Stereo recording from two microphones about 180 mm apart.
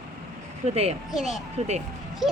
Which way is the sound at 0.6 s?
35° right (ahead or behind).